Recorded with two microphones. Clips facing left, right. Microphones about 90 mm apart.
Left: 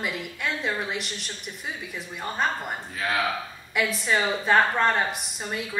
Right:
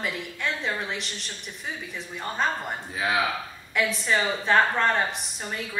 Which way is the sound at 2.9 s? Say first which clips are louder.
Right 2 dB; 15° right (ahead or behind).